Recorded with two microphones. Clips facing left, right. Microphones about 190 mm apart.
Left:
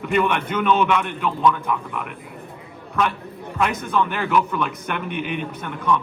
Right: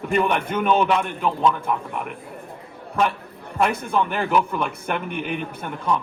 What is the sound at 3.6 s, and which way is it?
Speech, 30° right (ahead or behind).